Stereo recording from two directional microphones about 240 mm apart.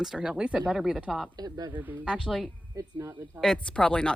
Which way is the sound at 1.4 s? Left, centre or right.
Centre.